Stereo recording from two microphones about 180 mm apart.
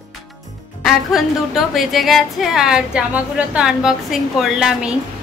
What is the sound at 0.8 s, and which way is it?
Music, centre (ahead or behind).